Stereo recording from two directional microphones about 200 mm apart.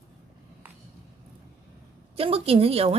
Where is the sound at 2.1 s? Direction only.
30° right (ahead or behind).